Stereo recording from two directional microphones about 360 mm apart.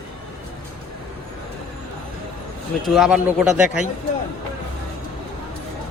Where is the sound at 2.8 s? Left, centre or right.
Centre.